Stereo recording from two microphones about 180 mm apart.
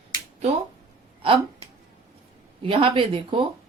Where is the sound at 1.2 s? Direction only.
30° right (ahead or behind).